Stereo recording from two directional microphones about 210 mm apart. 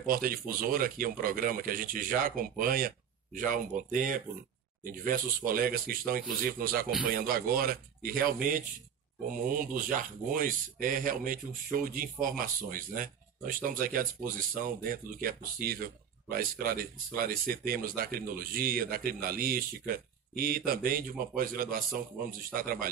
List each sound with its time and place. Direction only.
0.0 s speech: 45° right (ahead or behind)